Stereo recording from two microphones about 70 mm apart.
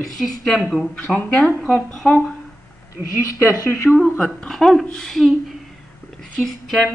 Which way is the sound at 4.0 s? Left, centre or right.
Centre.